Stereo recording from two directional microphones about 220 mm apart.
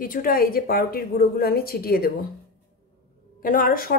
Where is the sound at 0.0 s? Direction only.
40° left (ahead or behind).